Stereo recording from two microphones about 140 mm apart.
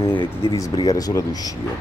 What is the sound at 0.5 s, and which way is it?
Speech, 25° left (ahead or behind).